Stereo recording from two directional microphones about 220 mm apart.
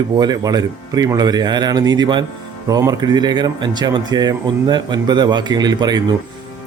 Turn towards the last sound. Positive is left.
turn(degrees=-20)  # may be behind; listen again after turning